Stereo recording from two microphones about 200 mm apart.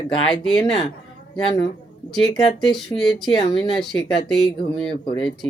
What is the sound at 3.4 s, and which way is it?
Speech, 25° left (ahead or behind).